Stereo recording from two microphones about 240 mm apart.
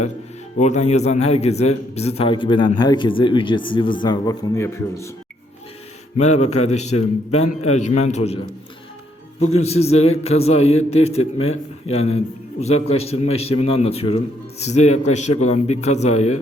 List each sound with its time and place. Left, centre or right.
0.6 s a man's voice: left; by 5.0 s centre
6.1 s a man's voice: left
9.5 s a man's voice: left